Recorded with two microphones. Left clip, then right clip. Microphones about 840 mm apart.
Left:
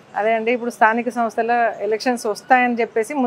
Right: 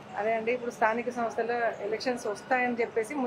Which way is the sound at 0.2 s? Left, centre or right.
Left.